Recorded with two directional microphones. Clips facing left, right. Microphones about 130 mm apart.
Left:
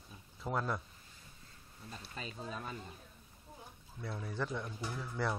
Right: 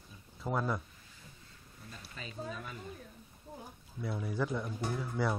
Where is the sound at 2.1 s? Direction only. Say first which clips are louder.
Right 2 dB; 35° left (ahead or behind).